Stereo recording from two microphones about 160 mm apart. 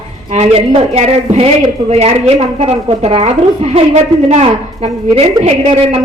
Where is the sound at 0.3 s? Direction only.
40° right (ahead or behind).